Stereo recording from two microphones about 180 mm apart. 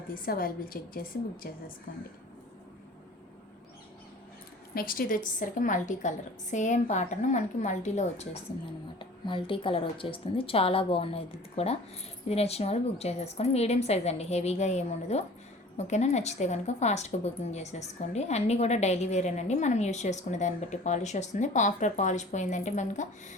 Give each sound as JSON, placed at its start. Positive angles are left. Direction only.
{"t": 0.1, "sound": "a woman's voice", "side_deg": 55}
{"t": 4.7, "sound": "a woman's voice", "side_deg": 55}
{"t": 9.0, "sound": "a woman's voice", "side_deg": 30}